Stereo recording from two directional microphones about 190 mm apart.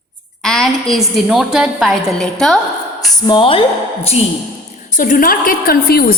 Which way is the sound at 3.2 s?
25° left (ahead or behind).